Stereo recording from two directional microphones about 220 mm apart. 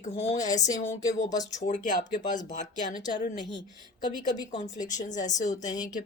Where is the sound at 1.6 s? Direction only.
35° left (ahead or behind).